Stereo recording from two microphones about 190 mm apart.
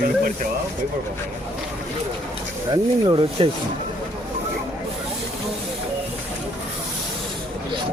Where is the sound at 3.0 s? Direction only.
25° right (ahead or behind).